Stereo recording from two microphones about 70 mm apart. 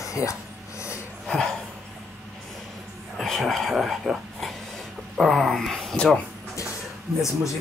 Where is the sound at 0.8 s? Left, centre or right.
Left.